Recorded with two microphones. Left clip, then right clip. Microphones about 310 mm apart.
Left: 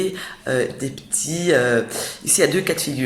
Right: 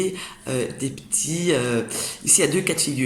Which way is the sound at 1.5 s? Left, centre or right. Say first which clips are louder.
Left 10 dB; left.